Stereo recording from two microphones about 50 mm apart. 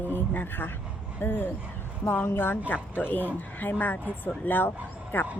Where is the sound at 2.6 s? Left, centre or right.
Left.